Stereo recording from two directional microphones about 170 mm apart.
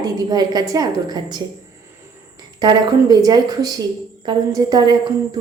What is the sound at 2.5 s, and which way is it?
A woman's voice, 25° right (ahead or behind).